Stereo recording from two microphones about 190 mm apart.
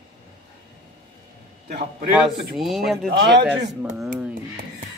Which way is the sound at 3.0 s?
65° right (ahead or behind).